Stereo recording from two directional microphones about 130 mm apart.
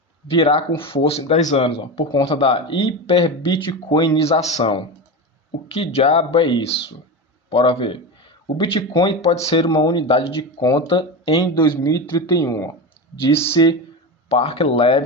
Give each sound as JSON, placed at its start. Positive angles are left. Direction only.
{"t": 0.3, "sound": "speech", "side_deg": 45}
{"t": 1.5, "sound": "speech", "side_deg": 45}
{"t": 4.2, "sound": "a man's voice", "side_deg": 55}
{"t": 5.7, "sound": "speech", "side_deg": 50}
{"t": 9.2, "sound": "speech", "side_deg": 55}
{"t": 9.6, "sound": "speech", "side_deg": 30}
{"t": 10.6, "sound": "speech", "side_deg": 30}
{"t": 10.8, "sound": "speech", "side_deg": 40}
{"t": 13.2, "sound": "speech", "side_deg": 50}